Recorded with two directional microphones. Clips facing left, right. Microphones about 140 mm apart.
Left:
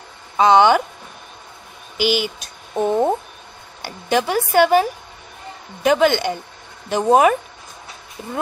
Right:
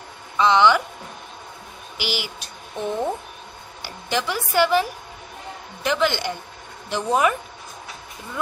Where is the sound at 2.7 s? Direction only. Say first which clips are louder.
Left 7 dB; 45° left (ahead or behind).